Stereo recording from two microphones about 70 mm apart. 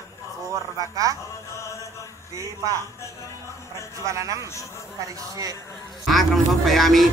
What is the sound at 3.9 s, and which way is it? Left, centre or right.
Speech, right.